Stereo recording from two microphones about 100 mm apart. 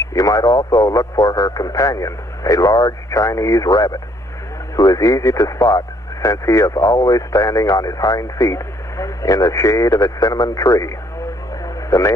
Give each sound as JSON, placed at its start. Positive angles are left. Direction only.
{"t": 0.1, "sound": "speech", "side_deg": 35}